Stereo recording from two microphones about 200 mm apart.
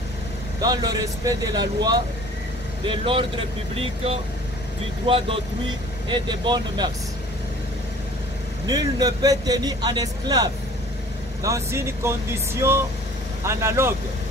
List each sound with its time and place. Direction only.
0.6 s a man's voice: 20° right (ahead or behind)
8.6 s a man's voice: 20° right (ahead or behind)